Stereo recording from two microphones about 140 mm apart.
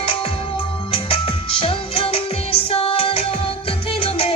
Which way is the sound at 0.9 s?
40° left (ahead or behind).